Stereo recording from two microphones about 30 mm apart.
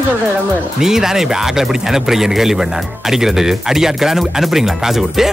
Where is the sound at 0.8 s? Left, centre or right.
Centre.